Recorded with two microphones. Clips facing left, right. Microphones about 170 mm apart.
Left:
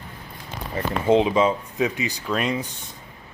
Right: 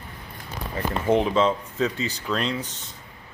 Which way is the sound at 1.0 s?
15° left (ahead or behind).